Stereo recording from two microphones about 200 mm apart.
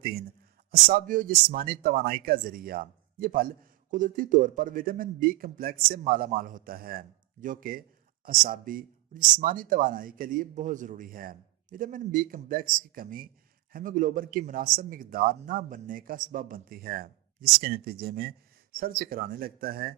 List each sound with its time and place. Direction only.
0.0 s a man's voice: 45° right (ahead or behind)